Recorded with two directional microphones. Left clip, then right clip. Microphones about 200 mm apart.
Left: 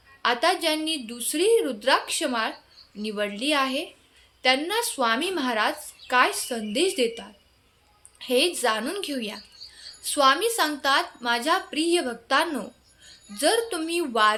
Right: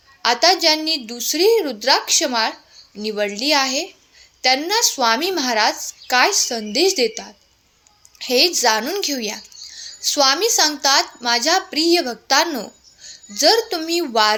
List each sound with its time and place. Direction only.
0.2 s speech: 25° right (ahead or behind)